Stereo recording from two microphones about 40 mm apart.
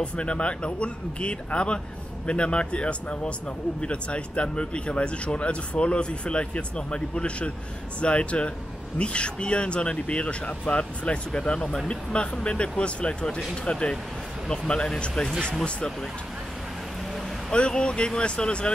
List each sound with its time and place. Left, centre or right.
0.0 s speech: left
17.5 s speech: left